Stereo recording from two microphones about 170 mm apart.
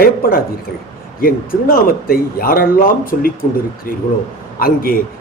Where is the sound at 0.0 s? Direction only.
60° left (ahead or behind).